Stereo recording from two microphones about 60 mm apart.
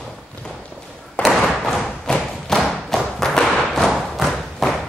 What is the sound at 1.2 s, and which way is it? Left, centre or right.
Thump, centre.